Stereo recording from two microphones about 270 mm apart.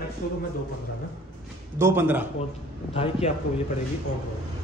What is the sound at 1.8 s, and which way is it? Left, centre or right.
Speech, centre.